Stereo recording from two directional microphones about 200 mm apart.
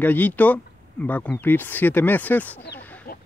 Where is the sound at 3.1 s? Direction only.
45° left (ahead or behind).